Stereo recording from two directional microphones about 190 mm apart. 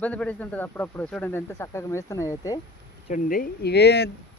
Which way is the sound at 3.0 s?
45° left (ahead or behind).